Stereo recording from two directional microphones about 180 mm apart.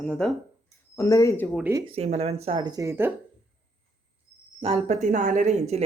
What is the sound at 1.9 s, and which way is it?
A woman's voice, 35° right (ahead or behind).